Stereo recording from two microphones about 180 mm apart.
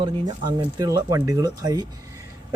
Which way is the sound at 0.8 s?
20° right (ahead or behind).